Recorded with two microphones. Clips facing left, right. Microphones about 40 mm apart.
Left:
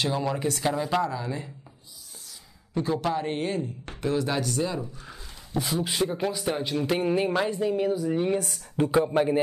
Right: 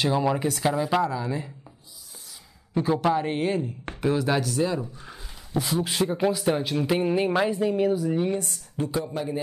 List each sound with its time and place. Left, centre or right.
0.0 s speech: centre
2.7 s speech: centre
5.0 s a sound: centre
5.6 s speech: centre
8.9 s speech: left